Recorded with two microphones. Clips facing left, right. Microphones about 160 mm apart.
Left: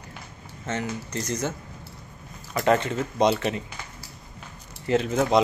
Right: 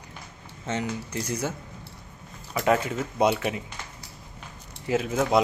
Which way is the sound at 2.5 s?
5° right (ahead or behind).